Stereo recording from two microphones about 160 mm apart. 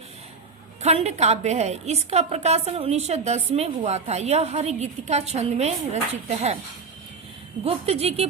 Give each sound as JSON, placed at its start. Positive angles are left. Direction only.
{"t": 0.8, "sound": "a woman's voice", "side_deg": -40}
{"t": 7.6, "sound": "speech", "side_deg": -40}